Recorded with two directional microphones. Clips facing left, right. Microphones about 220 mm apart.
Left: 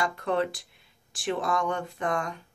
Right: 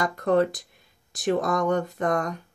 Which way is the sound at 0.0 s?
45° right (ahead or behind).